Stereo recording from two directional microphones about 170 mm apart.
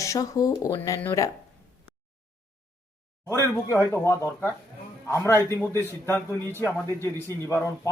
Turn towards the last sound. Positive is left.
turn(degrees=15)  # may be behind; listen again after turning